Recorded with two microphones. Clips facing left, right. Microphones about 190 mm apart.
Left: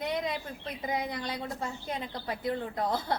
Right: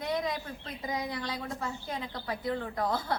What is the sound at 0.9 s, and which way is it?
Speech, 20° left (ahead or behind).